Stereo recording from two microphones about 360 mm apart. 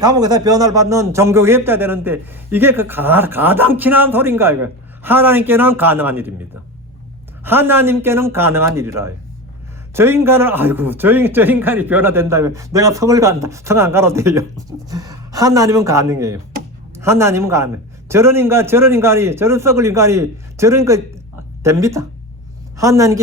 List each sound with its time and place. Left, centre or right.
0.0 s a man's voice: centre
7.4 s a man's voice: centre